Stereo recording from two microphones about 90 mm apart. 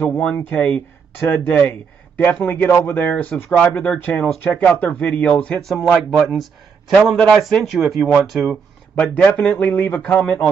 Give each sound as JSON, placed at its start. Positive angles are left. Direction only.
{"t": 0.0, "sound": "speech", "side_deg": 15}
{"t": 4.4, "sound": "speech", "side_deg": 25}
{"t": 5.6, "sound": "speech", "side_deg": 5}
{"t": 8.9, "sound": "speech", "side_deg": 15}